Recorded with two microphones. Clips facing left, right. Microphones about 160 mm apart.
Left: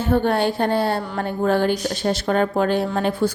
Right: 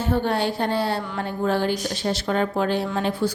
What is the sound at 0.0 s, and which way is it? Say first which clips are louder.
A woman's voice: left 4 dB; 55° left (ahead or behind).